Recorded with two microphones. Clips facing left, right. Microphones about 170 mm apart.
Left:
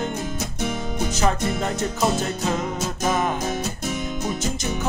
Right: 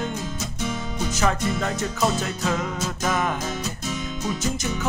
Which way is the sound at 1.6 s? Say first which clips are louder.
Left 2 dB; 25° left (ahead or behind).